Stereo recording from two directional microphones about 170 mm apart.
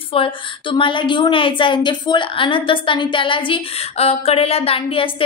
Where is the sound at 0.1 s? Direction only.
30° left (ahead or behind).